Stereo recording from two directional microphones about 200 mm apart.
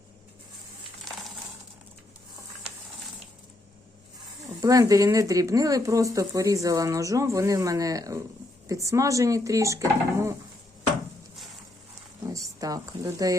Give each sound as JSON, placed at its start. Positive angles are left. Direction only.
{"t": 4.6, "sound": "speech", "side_deg": -15}
{"t": 12.3, "sound": "a woman's voice", "side_deg": -15}